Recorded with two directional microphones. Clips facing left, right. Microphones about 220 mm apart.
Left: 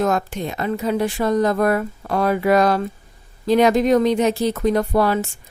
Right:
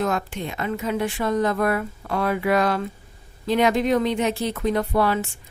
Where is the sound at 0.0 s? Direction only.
45° left (ahead or behind).